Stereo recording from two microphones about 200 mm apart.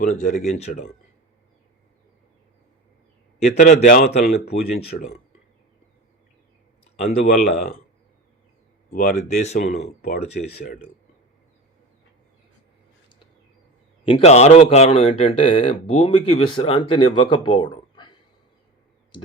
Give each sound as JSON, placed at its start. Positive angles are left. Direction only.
{"t": 0.0, "sound": "speech", "side_deg": 40}
{"t": 3.4, "sound": "speech", "side_deg": 35}
{"t": 4.9, "sound": "speech", "side_deg": 50}
{"t": 6.9, "sound": "speech", "side_deg": 35}
{"t": 8.9, "sound": "speech", "side_deg": 40}
{"t": 10.3, "sound": "speech", "side_deg": 50}
{"t": 14.0, "sound": "a man's voice", "side_deg": 30}